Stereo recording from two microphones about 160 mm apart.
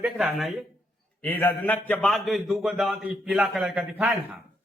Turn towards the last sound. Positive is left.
turn(degrees=-5)  # may be behind; listen again after turning